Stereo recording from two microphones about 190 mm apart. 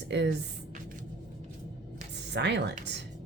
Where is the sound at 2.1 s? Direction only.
65° right (ahead or behind).